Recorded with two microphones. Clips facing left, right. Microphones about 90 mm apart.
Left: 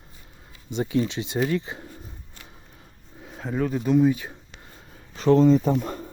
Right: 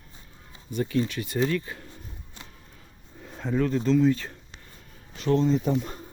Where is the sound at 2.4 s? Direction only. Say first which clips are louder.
Right 4 dB; 20° right (ahead or behind).